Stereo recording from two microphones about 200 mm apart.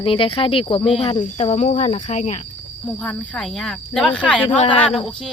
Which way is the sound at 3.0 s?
5° left (ahead or behind).